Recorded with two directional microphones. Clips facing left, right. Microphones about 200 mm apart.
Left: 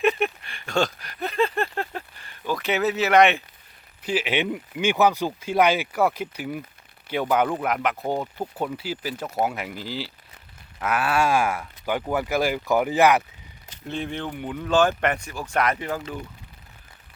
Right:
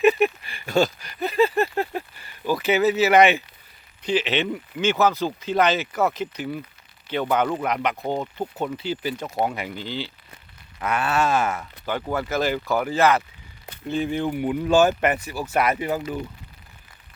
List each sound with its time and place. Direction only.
0.0 s a sound: 5° right (ahead or behind)
4.0 s speech: 10° left (ahead or behind)
13.8 s speech: 5° right (ahead or behind)